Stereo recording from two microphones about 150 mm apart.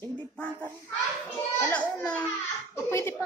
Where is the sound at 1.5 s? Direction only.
10° left (ahead or behind).